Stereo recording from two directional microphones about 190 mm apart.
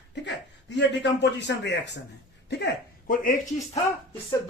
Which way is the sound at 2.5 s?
55° left (ahead or behind).